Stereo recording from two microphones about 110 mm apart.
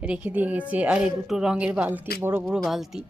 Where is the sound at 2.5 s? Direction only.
Centre (ahead or behind).